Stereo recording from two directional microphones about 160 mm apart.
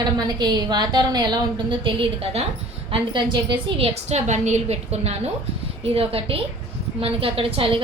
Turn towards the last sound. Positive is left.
turn(degrees=-35)  # may be behind; listen again after turning